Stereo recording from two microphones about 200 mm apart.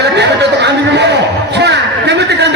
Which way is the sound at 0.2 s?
60° right (ahead or behind).